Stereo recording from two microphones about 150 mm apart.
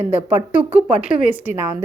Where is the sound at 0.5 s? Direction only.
10° right (ahead or behind).